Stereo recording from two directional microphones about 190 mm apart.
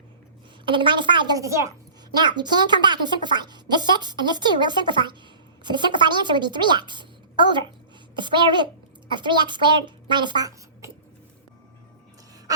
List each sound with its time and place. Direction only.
0.6 s a woman's voice: 25° right (ahead or behind)